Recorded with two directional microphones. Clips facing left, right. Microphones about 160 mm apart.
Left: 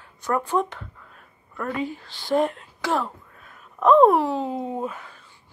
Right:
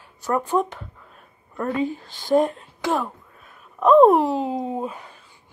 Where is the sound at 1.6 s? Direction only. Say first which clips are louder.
Right 4 dB; 25° right (ahead or behind).